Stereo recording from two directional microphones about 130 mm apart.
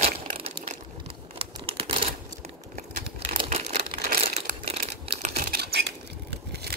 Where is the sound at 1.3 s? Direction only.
45° right (ahead or behind).